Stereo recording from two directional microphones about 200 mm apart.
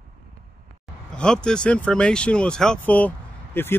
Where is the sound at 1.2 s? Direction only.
5° left (ahead or behind).